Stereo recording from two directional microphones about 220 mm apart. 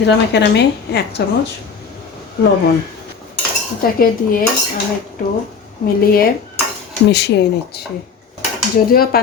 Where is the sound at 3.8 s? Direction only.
40° left (ahead or behind).